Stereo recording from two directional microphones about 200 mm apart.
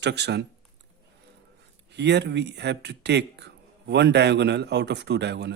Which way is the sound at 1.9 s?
60° right (ahead or behind).